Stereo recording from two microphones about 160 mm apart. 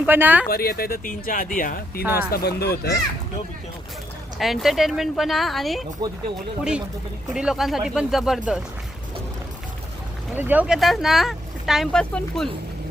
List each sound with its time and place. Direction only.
0.0 s speech: 10° right (ahead or behind)
0.4 s speech: 70° left (ahead or behind)
2.1 s speech: 75° left (ahead or behind)
4.4 s speech: centre (ahead or behind)
7.3 s speech: 5° right (ahead or behind)
10.3 s speech: 10° right (ahead or behind)